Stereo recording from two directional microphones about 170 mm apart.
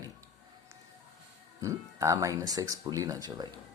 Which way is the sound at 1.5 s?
20° right (ahead or behind).